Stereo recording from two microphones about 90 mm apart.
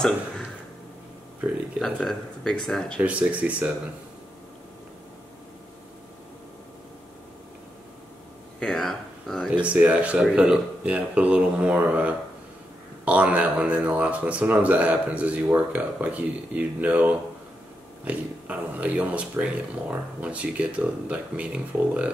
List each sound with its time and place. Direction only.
1.8 s speech: 5° left (ahead or behind)
3.0 s speech: 15° right (ahead or behind)
8.5 s speech: 10° left (ahead or behind)
9.6 s speech: 15° right (ahead or behind)